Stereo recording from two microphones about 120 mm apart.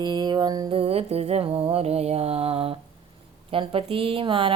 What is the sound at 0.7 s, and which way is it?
Music, 55° right (ahead or behind).